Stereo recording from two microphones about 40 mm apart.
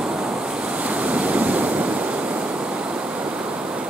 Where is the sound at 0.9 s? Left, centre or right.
Right.